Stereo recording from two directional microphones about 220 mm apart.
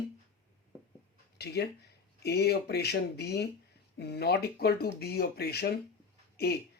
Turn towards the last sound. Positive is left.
turn(degrees=45)  # may be behind; listen again after turning